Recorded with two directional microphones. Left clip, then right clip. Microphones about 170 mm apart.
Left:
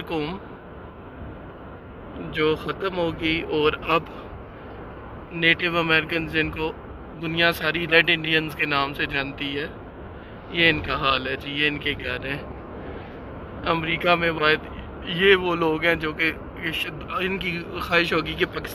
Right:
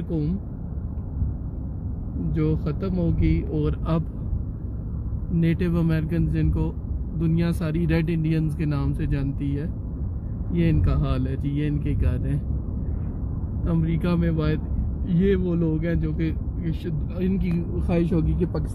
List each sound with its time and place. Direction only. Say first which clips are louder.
2.3 s speech: left 6 dB; 10° right (ahead or behind)
5.4 s speech: left 7 dB; 15° right (ahead or behind)
13.7 s speech: left 8 dB; 10° right (ahead or behind)